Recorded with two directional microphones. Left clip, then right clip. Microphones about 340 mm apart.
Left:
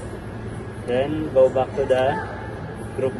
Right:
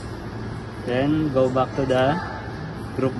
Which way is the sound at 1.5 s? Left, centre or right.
Right.